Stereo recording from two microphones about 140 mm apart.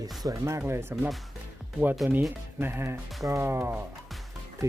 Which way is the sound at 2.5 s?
15° right (ahead or behind).